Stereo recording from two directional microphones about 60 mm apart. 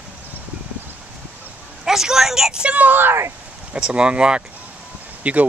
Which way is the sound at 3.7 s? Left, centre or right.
Centre.